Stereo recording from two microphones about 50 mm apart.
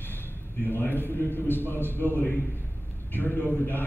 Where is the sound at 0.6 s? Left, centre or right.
Left.